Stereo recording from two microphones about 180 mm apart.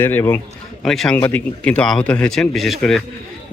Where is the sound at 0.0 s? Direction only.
10° left (ahead or behind).